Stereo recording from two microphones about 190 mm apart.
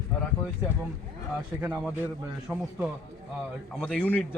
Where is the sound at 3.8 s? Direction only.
5° left (ahead or behind).